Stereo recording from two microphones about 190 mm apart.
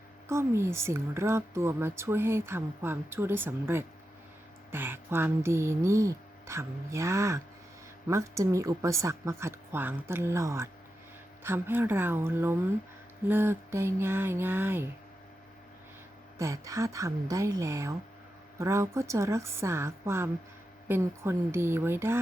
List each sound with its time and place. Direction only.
0.3 s speech: 15° right (ahead or behind)
16.4 s speech: 15° right (ahead or behind)